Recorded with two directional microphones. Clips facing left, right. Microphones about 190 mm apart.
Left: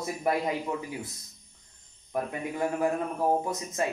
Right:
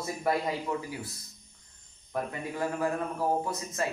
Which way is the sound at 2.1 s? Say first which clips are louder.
Left 2 dB; 20° left (ahead or behind).